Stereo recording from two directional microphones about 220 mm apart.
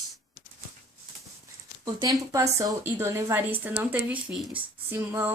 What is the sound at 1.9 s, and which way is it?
A woman's voice, 15° right (ahead or behind).